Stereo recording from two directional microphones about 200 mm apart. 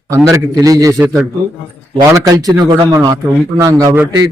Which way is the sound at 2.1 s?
20° right (ahead or behind).